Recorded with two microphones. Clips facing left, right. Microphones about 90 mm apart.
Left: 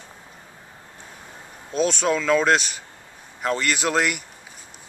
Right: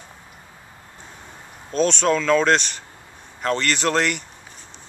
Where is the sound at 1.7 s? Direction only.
5° left (ahead or behind).